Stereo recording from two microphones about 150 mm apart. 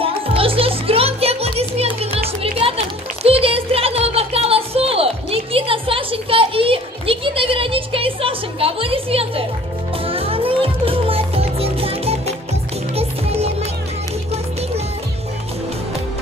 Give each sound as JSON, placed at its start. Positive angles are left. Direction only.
{"t": 0.0, "sound": "music", "side_deg": -40}